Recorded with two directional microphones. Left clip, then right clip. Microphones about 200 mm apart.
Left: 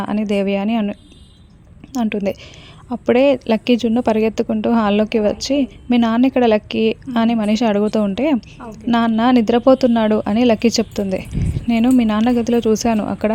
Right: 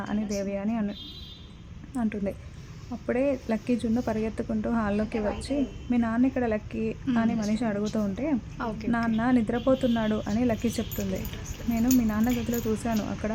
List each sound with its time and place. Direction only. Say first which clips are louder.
0.0 s a woman's voice: left 12 dB; 35° left (ahead or behind)